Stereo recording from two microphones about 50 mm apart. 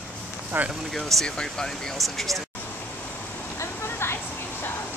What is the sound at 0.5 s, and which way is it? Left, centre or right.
Speech, right.